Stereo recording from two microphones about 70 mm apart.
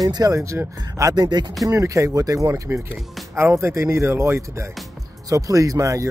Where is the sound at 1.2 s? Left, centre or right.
Right.